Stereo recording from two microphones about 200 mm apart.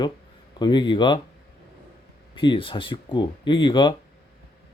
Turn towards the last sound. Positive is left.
turn(degrees=25)  # may be behind; listen again after turning